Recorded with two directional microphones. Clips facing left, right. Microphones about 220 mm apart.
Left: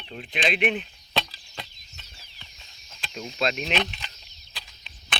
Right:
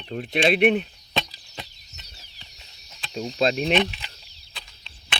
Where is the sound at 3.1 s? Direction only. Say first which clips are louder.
Right 5 dB; 35° right (ahead or behind).